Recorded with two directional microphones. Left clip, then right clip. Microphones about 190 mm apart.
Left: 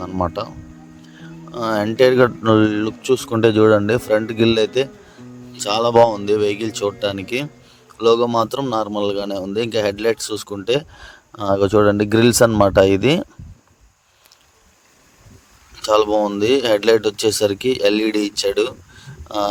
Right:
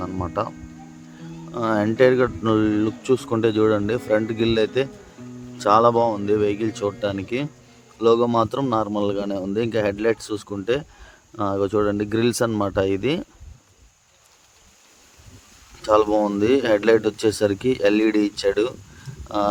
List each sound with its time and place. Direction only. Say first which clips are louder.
0.0 s speech: left 3 dB; 30° left (ahead or behind)
1.5 s a man's voice: left 2 dB; 30° left (ahead or behind)
15.8 s a man's voice: left 2 dB; 35° left (ahead or behind)